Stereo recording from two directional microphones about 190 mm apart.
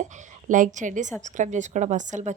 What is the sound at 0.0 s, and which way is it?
A woman's voice, 45° right (ahead or behind).